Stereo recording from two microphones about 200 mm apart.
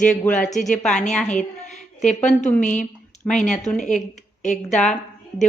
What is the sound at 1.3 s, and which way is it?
A woman's voice, 40° left (ahead or behind).